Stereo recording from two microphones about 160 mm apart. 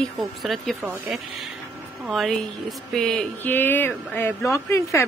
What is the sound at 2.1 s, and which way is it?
A woman's voice, centre (ahead or behind).